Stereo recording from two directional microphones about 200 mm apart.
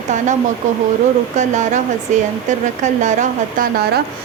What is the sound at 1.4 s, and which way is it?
Speech, 35° right (ahead or behind).